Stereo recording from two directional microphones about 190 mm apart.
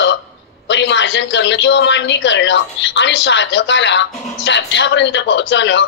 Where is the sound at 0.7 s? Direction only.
70° left (ahead or behind).